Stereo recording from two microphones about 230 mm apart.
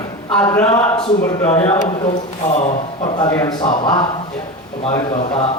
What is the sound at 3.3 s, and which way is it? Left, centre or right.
Speech, centre.